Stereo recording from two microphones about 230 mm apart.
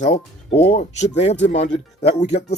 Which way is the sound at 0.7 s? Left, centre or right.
Left.